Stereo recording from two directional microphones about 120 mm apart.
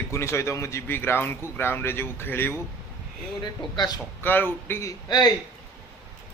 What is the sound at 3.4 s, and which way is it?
Speech, 35° left (ahead or behind).